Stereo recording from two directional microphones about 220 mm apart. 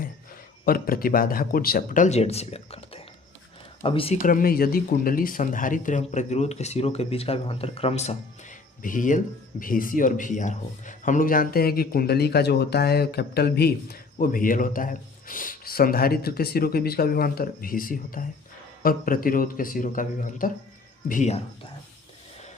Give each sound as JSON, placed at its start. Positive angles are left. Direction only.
{"t": 0.6, "sound": "speech", "side_deg": 40}